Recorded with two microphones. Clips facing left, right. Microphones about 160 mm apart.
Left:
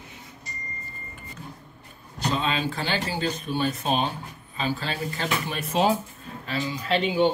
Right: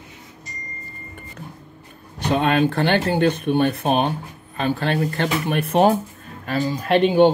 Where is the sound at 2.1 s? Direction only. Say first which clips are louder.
Right 8 dB; 60° right (ahead or behind).